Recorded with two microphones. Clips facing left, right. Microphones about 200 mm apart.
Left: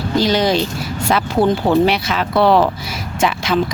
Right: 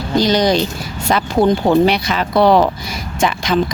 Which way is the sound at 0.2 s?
5° left (ahead or behind).